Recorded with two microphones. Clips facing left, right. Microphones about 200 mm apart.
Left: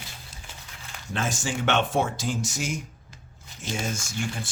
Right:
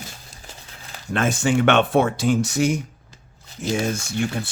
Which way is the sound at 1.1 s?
60° right (ahead or behind).